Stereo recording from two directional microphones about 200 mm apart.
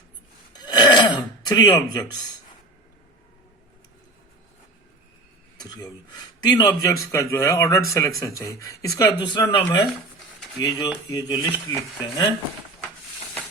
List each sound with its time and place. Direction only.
0.5 s throat clearing: 20° left (ahead or behind)
5.5 s speech: 20° left (ahead or behind)